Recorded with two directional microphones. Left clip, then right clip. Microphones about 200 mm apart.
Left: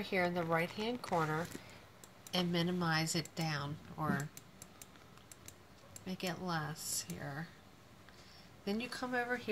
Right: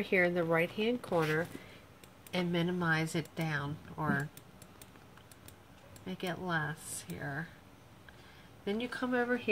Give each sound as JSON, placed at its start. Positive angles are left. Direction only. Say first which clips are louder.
{"t": 0.0, "sound": "speech", "louder": "right 6 dB", "side_deg": -40}
{"t": 6.0, "sound": "speech", "louder": "right 3 dB", "side_deg": -30}
{"t": 8.6, "sound": "speech", "louder": "right 4 dB", "side_deg": -35}